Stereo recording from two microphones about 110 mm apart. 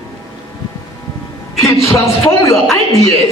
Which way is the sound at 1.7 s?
25° left (ahead or behind).